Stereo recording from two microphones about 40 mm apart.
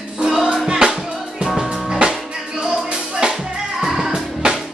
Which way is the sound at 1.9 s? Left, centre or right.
Centre.